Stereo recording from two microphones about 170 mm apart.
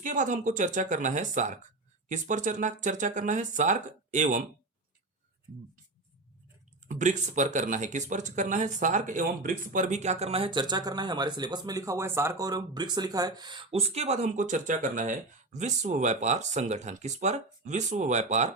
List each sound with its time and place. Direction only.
0.0 s speech: 50° right (ahead or behind)
6.8 s speech: 45° right (ahead or behind)